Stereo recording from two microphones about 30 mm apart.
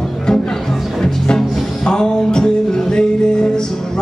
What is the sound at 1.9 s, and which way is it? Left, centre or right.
Music, left.